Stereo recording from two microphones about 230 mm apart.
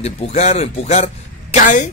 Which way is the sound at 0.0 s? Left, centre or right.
Left.